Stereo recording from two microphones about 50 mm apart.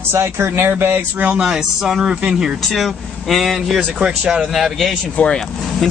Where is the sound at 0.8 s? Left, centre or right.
Right.